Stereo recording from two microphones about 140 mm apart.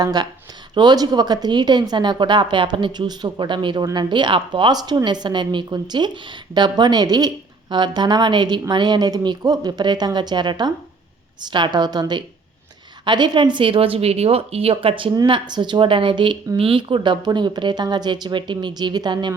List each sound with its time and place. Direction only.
0.0 s speech: 30° right (ahead or behind)